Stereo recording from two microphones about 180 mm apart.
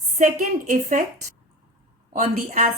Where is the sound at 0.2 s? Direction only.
45° right (ahead or behind).